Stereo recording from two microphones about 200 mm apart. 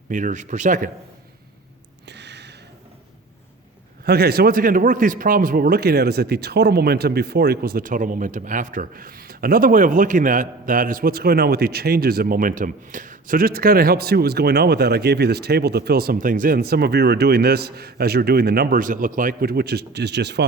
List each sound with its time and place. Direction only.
0.1 s speech: 40° right (ahead or behind)
2.0 s a sound: 60° right (ahead or behind)
4.0 s speech: 50° right (ahead or behind)